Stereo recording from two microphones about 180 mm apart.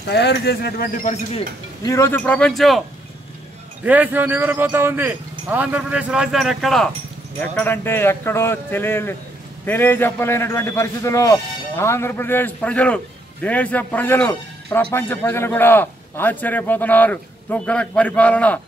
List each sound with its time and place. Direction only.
0.1 s speech: 70° left (ahead or behind)
1.8 s a man's voice: 15° left (ahead or behind); by 2.8 s centre (ahead or behind)
3.8 s a man's voice: 10° right (ahead or behind); by 18.6 s 5° left (ahead or behind)